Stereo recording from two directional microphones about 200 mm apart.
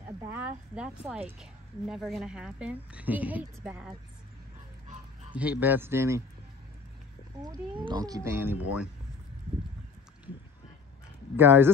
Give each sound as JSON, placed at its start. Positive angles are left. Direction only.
{"t": 0.3, "sound": "a woman's voice", "side_deg": -10}
{"t": 5.3, "sound": "speech", "side_deg": -5}
{"t": 7.4, "sound": "speech", "side_deg": -20}
{"t": 11.3, "sound": "speech", "side_deg": -10}